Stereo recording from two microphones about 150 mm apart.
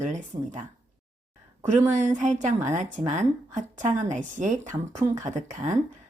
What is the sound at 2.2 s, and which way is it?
A woman's voice, 55° right (ahead or behind).